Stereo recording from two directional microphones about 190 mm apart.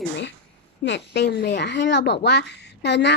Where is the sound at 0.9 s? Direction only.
65° left (ahead or behind).